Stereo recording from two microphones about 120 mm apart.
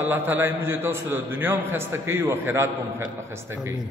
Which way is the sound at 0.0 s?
15° right (ahead or behind).